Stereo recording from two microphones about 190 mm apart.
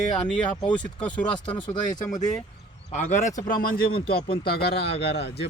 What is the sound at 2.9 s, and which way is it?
A man's voice, 40° left (ahead or behind).